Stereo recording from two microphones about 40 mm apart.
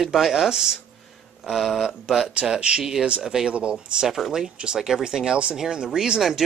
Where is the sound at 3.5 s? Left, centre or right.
Right.